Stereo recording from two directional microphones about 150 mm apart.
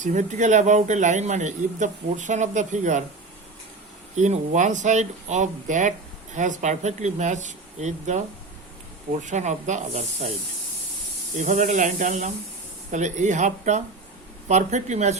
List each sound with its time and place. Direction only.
0.0 s speech: 55° right (ahead or behind)
4.1 s speech: 50° right (ahead or behind)
9.2 s speech: 50° right (ahead or behind)
11.3 s speech: 55° right (ahead or behind)